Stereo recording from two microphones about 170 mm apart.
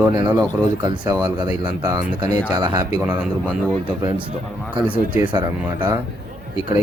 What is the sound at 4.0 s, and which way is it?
Speech, 25° right (ahead or behind).